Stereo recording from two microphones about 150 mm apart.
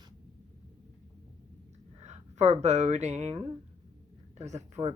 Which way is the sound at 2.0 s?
50° right (ahead or behind).